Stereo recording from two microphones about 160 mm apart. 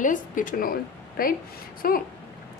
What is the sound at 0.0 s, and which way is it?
A woman's voice, 55° left (ahead or behind).